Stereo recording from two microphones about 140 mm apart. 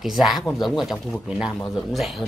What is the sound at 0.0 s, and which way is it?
Speech, centre (ahead or behind).